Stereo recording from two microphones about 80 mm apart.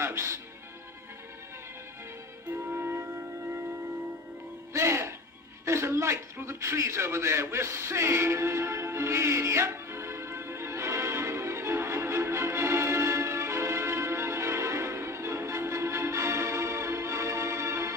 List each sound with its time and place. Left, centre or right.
0.0 s a man's voice: right
2.7 s music: right
4.7 s music: right
5.6 s a sound: right